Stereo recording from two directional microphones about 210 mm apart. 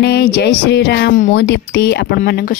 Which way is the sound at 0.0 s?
50° left (ahead or behind).